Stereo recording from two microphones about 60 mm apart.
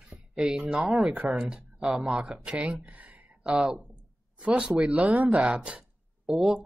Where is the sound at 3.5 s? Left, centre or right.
Centre.